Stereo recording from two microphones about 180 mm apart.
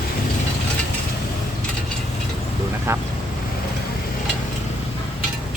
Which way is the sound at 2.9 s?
15° right (ahead or behind).